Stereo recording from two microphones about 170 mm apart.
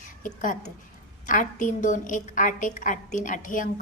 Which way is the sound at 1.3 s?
45° left (ahead or behind).